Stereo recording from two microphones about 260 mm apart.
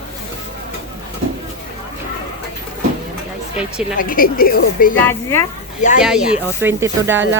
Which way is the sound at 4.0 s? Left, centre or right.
Left.